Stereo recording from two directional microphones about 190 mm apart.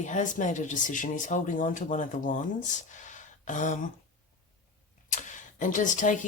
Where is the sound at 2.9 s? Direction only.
40° left (ahead or behind).